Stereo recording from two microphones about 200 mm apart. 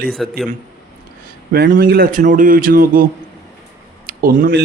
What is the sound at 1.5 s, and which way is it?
Speech, 50° right (ahead or behind).